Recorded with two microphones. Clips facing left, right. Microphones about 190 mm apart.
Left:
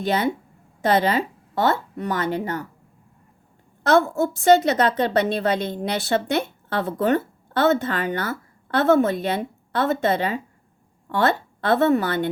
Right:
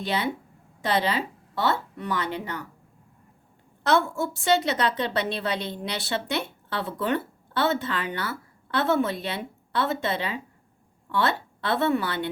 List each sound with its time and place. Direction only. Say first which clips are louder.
0.0 s a woman's voice: left 5 dB; 45° left (ahead or behind)
3.8 s a woman's voice: left 5 dB; 45° left (ahead or behind)